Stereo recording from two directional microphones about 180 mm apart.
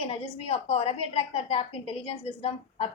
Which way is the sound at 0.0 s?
35° left (ahead or behind).